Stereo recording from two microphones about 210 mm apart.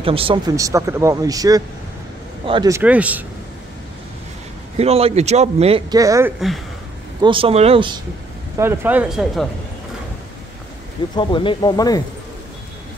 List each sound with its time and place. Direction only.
0.0 s speech: 25° right (ahead or behind)
2.8 s speech: 5° right (ahead or behind)
4.7 s speech: 30° right (ahead or behind)
8.5 s speech: 10° right (ahead or behind)
11.1 s speech: 20° left (ahead or behind)